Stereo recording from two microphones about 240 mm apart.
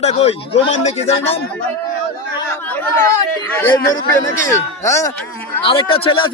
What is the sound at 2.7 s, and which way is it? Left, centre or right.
Chatter, centre.